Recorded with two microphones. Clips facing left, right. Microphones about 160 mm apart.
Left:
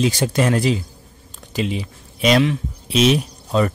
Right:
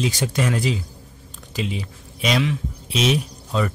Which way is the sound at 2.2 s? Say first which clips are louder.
Left 5 dB; 55° left (ahead or behind).